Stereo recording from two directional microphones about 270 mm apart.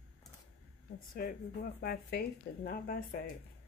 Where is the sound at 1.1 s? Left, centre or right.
Left.